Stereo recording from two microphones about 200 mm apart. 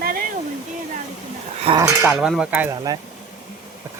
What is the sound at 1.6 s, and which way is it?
Speech, 20° right (ahead or behind).